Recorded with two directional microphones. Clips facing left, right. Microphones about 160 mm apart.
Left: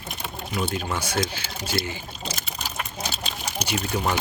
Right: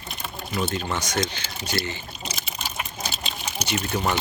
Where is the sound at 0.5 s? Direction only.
5° left (ahead or behind).